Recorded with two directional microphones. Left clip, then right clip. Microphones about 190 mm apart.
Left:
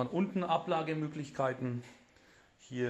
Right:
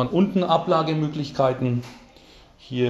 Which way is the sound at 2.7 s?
20° left (ahead or behind).